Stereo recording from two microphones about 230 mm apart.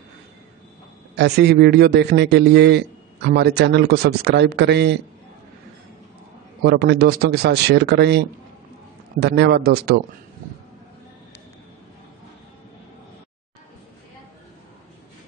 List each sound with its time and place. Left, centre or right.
1.1 s a man's voice: right
6.6 s a man's voice: right